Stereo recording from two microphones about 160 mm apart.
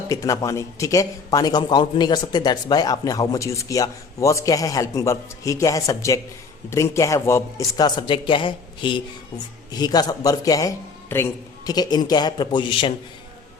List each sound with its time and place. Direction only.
0.1 s a man's voice: 20° left (ahead or behind)